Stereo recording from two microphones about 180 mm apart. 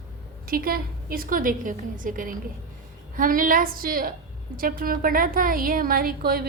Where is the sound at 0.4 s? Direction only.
55° right (ahead or behind).